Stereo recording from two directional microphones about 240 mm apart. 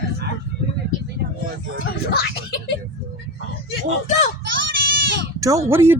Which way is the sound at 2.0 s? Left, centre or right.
Left.